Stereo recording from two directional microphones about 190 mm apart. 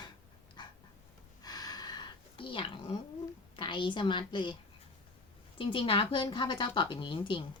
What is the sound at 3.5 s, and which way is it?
A woman's voice, 25° left (ahead or behind).